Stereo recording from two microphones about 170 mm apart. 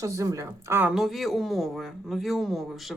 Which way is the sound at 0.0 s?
20° right (ahead or behind).